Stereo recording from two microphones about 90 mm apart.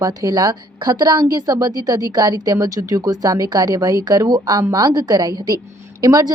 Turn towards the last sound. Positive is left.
turn(degrees=-40)  # may be behind; listen again after turning